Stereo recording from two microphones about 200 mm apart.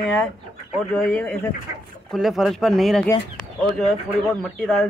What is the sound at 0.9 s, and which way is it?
Speech, 5° left (ahead or behind).